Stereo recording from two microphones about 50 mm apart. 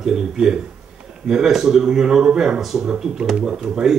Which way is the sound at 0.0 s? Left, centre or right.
Centre.